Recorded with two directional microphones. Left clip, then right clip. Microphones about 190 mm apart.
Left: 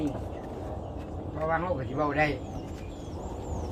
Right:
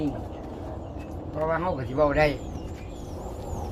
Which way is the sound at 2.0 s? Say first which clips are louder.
Right 6 dB; 65° right (ahead or behind).